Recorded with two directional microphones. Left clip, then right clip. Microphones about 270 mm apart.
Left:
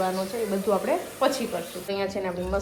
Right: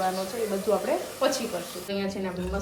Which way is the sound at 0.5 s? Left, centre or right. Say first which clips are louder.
Left 1 dB; centre.